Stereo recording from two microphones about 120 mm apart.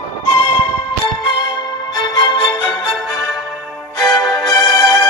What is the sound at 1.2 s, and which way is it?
Music, 35° left (ahead or behind).